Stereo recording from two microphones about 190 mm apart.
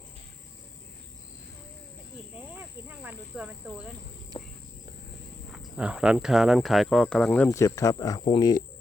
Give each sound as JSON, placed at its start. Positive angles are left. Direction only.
{"t": 2.3, "sound": "speech", "side_deg": -10}
{"t": 4.3, "sound": "a sound", "side_deg": 25}
{"t": 5.5, "sound": "speech", "side_deg": -5}